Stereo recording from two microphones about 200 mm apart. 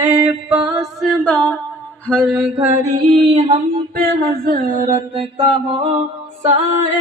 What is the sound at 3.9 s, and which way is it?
Mantra, 50° right (ahead or behind).